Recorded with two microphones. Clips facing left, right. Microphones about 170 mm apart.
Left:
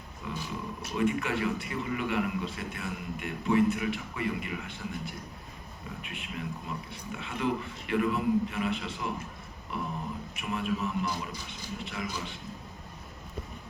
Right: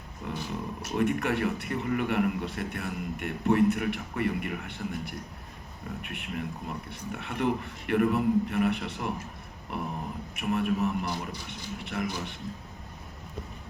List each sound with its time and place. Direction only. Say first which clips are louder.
0.3 s a man's voice: right 2 dB; 60° right (ahead or behind)